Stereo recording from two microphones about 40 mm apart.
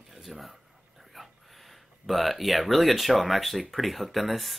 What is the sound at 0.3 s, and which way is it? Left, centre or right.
Speech, centre.